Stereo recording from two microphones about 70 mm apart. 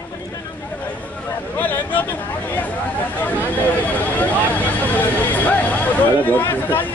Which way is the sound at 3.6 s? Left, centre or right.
Left.